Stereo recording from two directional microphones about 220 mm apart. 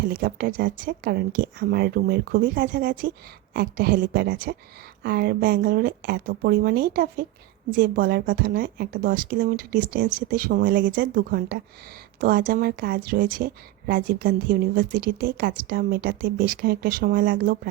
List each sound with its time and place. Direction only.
0.0 s a woman's voice: 45° right (ahead or behind)